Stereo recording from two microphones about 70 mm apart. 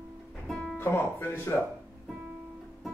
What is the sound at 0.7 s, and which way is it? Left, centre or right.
Speech, left.